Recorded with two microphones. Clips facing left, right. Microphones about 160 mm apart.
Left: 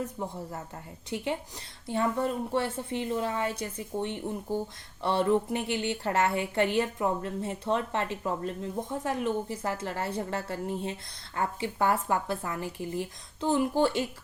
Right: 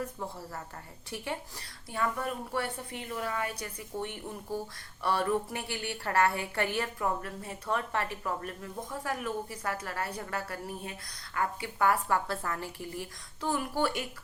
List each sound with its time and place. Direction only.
0.0 s a woman's voice: 20° left (ahead or behind)